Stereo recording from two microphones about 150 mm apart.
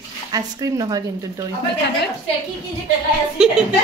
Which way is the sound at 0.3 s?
25° right (ahead or behind).